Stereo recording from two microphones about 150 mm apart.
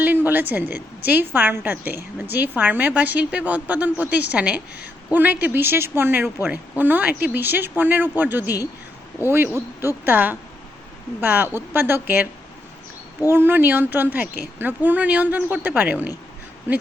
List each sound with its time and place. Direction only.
0.0 s a woman's voice: 15° right (ahead or behind)
13.2 s a woman's voice: 15° right (ahead or behind)